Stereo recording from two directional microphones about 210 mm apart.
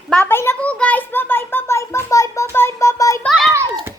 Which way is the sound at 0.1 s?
10° left (ahead or behind).